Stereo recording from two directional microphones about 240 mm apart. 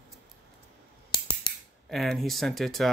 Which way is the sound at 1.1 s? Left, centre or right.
Centre.